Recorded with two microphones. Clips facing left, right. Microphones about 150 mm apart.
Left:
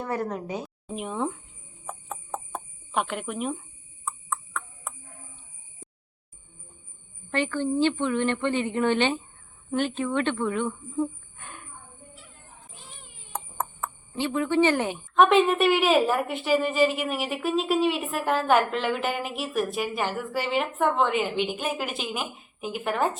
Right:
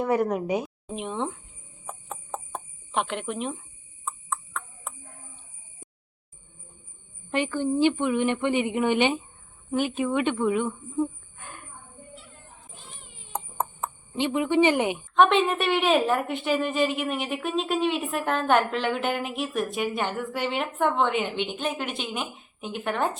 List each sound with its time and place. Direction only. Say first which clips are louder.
0.0 s a woman's voice: right 6 dB; 15° right (ahead or behind)
0.9 s a woman's voice: left 1 dB; 5° left (ahead or behind)
1.9 s a sound: left 1 dB; centre (ahead or behind)
7.3 s a woman's voice: right 1 dB; 15° right (ahead or behind)
13.3 s a sound: right 2 dB; 20° right (ahead or behind)
15.1 s a woman's voice: left 2 dB; centre (ahead or behind)